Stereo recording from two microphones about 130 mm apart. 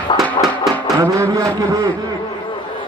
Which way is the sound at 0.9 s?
25° right (ahead or behind).